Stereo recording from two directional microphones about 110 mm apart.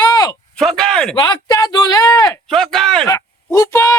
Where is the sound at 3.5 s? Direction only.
30° left (ahead or behind).